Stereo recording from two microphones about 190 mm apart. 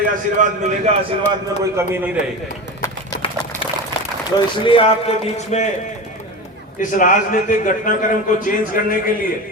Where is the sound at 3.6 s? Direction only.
30° left (ahead or behind).